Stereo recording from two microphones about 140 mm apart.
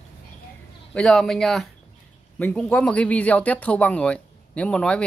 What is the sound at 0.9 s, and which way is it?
A man's voice, 5° left (ahead or behind).